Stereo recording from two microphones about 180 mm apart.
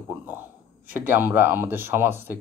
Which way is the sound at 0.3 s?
10° right (ahead or behind).